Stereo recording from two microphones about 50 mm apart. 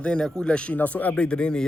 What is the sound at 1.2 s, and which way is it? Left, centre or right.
Speech, left.